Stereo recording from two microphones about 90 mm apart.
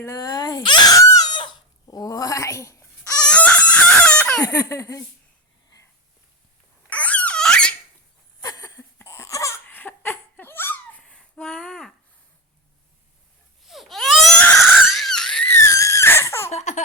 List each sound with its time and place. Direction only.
0.0 s speech: 40° left (ahead or behind)
0.6 s speech: 55° left (ahead or behind)
0.9 s a sound: 45° left (ahead or behind)
1.4 s chicken: 55° left (ahead or behind); by 3.1 s 35° left (ahead or behind)
3.1 s chicken: 10° left (ahead or behind)
4.4 s speech: 35° left (ahead or behind)
6.9 s squeak: 15° left (ahead or behind)
8.4 s a sound: 45° left (ahead or behind)
9.6 s laughter: 20° left (ahead or behind)
11.1 s a sound: 10° left (ahead or behind)
13.7 s baby cry: centre (ahead or behind)
14.3 s crying: 15° left (ahead or behind)
14.8 s a sound: centre (ahead or behind)
15.4 s whistle: 30° left (ahead or behind)